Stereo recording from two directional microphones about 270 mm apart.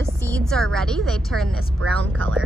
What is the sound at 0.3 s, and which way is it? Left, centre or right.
A woman's voice, centre.